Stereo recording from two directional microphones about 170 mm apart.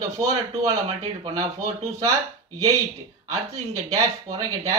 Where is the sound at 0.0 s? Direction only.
20° right (ahead or behind).